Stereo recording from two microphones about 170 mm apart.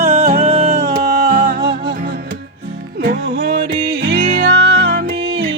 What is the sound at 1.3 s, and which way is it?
Music, 55° right (ahead or behind).